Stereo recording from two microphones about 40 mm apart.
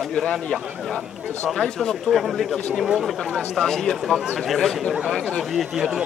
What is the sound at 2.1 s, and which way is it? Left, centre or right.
Speech, centre.